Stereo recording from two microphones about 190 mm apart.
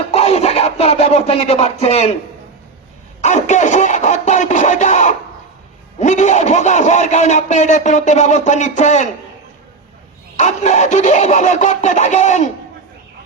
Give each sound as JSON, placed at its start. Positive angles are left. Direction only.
{"t": 0.1, "sound": "speech", "side_deg": 35}
{"t": 3.2, "sound": "a man's voice", "side_deg": 40}
{"t": 10.3, "sound": "a man's voice", "side_deg": 40}